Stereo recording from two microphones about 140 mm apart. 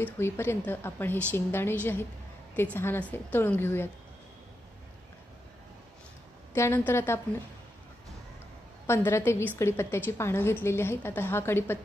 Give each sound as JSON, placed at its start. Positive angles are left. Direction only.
{"t": 0.0, "sound": "a woman's voice", "side_deg": 15}
{"t": 6.5, "sound": "a woman's voice", "side_deg": 15}
{"t": 8.8, "sound": "a woman's voice", "side_deg": 20}